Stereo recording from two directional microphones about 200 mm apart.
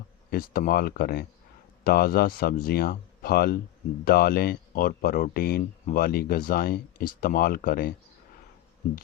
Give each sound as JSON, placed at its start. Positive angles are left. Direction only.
{"t": 0.3, "sound": "speech", "side_deg": 45}